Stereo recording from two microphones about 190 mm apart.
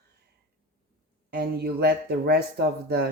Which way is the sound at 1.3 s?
55° right (ahead or behind).